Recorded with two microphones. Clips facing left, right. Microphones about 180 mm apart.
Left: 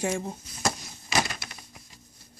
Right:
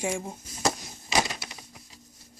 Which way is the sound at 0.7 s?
15° right (ahead or behind).